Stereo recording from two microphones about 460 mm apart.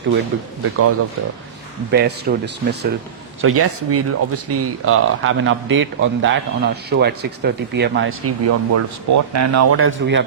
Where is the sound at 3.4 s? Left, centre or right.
Right.